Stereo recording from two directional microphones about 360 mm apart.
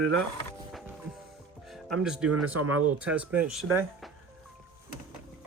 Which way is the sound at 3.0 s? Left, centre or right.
Centre.